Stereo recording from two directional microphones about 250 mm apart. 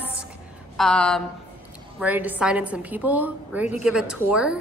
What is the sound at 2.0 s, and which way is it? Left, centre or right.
A woman's voice, centre.